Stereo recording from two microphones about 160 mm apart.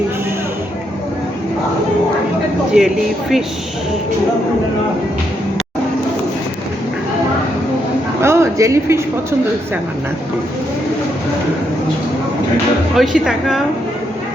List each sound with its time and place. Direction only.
2.7 s speech: 5° right (ahead or behind)
8.2 s a sound: 15° right (ahead or behind)
13.0 s speech: centre (ahead or behind)